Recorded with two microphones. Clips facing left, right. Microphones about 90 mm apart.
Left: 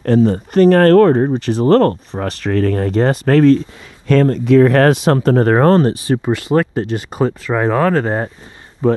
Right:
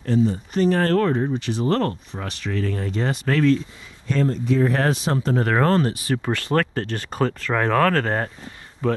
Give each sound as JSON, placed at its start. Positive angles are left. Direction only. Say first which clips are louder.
{"t": 0.0, "sound": "speech", "louder": "left 8 dB", "side_deg": 65}
{"t": 4.1, "sound": "speech", "louder": "left 10 dB", "side_deg": 70}
{"t": 5.4, "sound": "speech", "louder": "left 7 dB", "side_deg": 40}
{"t": 6.2, "sound": "speech", "louder": "left 6 dB", "side_deg": 15}